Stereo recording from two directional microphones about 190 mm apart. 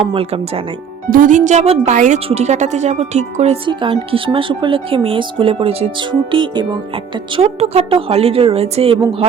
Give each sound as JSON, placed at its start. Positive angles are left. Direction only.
{"t": 0.1, "sound": "speech", "side_deg": -30}
{"t": 1.1, "sound": "speech", "side_deg": -45}